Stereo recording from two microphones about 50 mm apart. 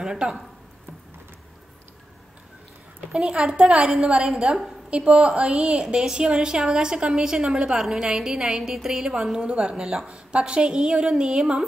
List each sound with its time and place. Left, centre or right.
0.0 s speech: centre
3.1 s a woman's voice: centre